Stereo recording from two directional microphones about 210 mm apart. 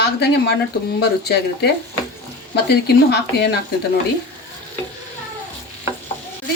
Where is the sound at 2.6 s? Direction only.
50° left (ahead or behind).